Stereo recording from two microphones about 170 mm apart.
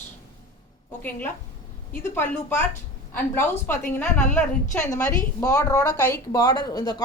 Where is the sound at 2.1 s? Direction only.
15° left (ahead or behind).